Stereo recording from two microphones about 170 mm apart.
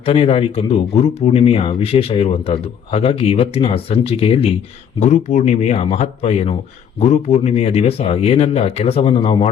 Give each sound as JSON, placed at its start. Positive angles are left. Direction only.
{"t": 0.0, "sound": "speech", "side_deg": 35}
{"t": 4.9, "sound": "speech", "side_deg": 45}